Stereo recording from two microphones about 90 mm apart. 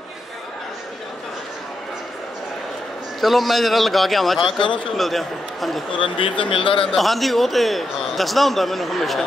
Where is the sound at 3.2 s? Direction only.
Centre (ahead or behind).